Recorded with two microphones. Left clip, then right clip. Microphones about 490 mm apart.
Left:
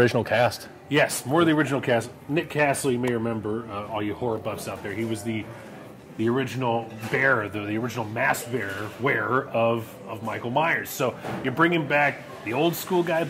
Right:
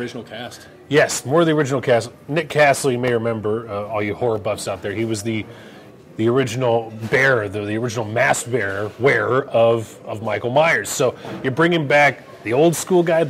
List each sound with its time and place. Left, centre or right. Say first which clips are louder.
0.0 s a man's voice: left 10 dB; left
0.8 s speech: right 6 dB; right